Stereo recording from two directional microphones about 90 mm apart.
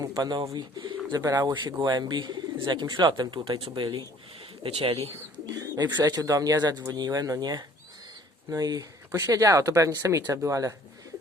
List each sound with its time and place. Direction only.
0.0 s speech: 50° right (ahead or behind); by 4.0 s 70° right (ahead or behind)
4.6 s speech: 90° right
5.5 s speech: 40° right (ahead or behind)